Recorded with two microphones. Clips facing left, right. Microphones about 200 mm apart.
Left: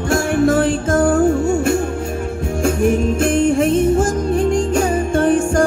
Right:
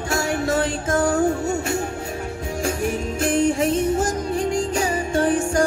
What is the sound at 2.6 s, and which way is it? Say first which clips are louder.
Music: left 9 dB; 55° left (ahead or behind).